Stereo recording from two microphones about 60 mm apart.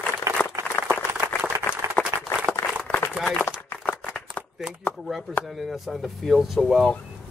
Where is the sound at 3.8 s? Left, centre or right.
Left.